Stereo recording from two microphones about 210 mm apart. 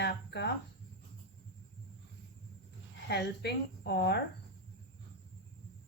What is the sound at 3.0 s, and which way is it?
A woman's voice, 55° left (ahead or behind).